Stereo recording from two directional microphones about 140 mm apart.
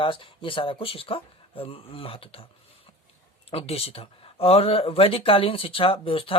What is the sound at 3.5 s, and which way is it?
Speech, 45° left (ahead or behind).